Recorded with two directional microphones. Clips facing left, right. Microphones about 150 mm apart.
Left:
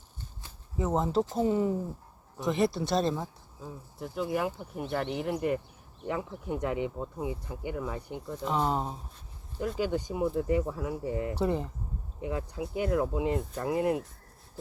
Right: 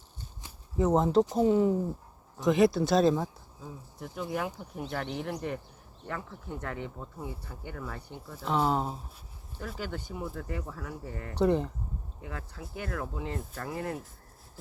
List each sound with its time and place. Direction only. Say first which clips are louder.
0.8 s speech: right 4 dB; centre (ahead or behind)
1.2 s speech: right 3 dB; 15° right (ahead or behind)
1.5 s speech: right 3 dB; centre (ahead or behind)
6.1 s speech: left 6 dB; 15° left (ahead or behind)
8.3 s speech: right 1 dB; 5° right (ahead or behind)
9.7 s speech: left 7 dB; 15° left (ahead or behind)
11.3 s speech: right 7 dB; 5° left (ahead or behind)
12.2 s speech: left 10 dB; 20° left (ahead or behind)